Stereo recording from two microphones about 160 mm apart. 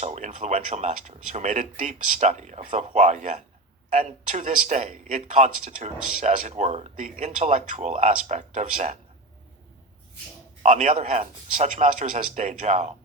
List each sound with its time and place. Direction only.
0.0 s speech: 45° right (ahead or behind)
10.6 s speech: 50° right (ahead or behind)